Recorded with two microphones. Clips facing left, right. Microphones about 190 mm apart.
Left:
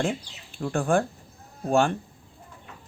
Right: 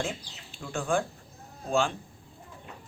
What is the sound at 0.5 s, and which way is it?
Speech, 55° left (ahead or behind).